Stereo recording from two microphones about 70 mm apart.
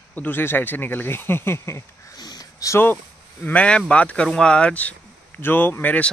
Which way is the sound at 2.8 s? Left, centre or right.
Left.